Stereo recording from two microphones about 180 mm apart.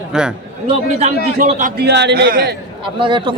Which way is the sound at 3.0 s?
25° right (ahead or behind).